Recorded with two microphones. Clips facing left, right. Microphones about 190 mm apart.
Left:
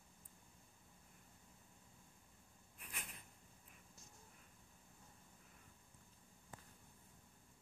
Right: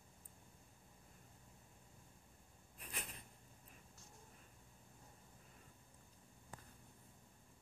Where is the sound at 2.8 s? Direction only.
35° right (ahead or behind).